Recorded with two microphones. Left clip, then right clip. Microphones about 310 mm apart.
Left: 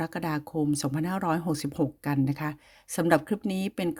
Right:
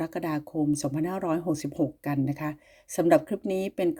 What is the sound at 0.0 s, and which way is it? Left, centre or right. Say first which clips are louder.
Speech: right 1 dB; left.